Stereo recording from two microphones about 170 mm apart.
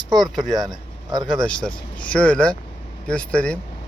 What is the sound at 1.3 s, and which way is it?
Speech, 5° left (ahead or behind).